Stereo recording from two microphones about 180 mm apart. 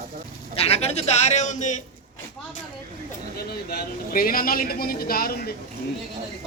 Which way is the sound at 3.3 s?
55° left (ahead or behind).